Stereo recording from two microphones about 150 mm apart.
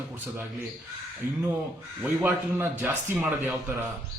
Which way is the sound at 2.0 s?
15° right (ahead or behind).